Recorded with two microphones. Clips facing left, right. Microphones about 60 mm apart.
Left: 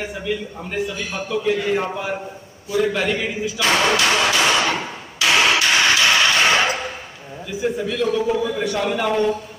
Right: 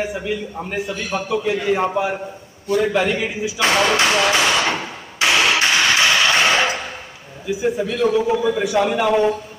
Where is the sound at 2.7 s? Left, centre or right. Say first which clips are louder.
Right 2 dB; right.